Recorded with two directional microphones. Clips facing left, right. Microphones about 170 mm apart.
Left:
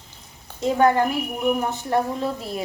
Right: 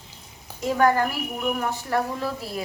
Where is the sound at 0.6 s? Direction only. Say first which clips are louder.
Left 2 dB; 25° left (ahead or behind).